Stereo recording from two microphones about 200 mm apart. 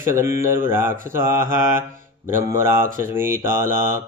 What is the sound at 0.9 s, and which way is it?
Speech, 45° right (ahead or behind).